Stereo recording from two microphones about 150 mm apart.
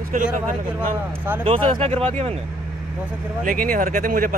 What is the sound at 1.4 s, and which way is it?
Speech, 40° right (ahead or behind).